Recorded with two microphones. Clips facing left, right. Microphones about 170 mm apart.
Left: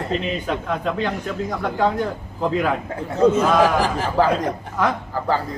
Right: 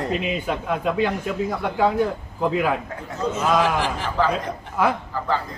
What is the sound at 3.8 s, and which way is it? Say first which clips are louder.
Speech: left 4 dB; 40° left (ahead or behind).